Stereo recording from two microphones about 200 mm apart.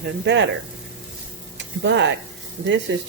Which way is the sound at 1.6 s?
65° right (ahead or behind).